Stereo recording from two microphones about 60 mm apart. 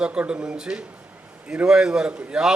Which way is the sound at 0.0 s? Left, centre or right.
Centre.